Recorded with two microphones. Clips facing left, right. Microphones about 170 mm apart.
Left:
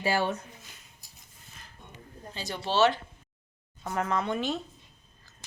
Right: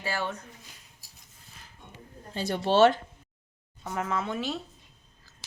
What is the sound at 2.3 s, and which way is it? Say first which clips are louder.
Speech: right 5 dB; 55° right (ahead or behind).